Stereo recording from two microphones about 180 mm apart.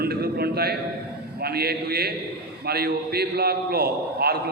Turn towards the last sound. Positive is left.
turn(degrees=-60)  # may be behind; listen again after turning